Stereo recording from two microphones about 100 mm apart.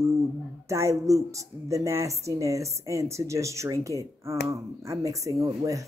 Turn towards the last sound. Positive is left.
turn(degrees=-35)  # may be behind; listen again after turning